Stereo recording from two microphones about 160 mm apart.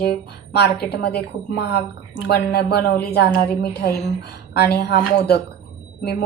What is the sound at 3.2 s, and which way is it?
A woman's voice, 90° left.